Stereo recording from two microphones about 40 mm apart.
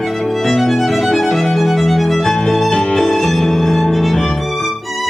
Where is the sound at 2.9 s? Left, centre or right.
Centre.